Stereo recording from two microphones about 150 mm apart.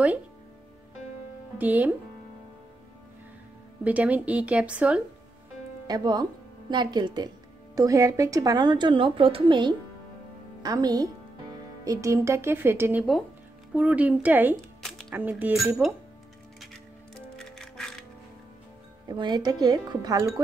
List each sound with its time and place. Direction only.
1.6 s a woman's voice: 10° right (ahead or behind)
3.8 s a woman's voice: 10° right (ahead or behind)
5.9 s a woman's voice: 25° right (ahead or behind); by 16.0 s 10° right (ahead or behind)
17.1 s music: 5° left (ahead or behind)
19.0 s speech: 30° right (ahead or behind)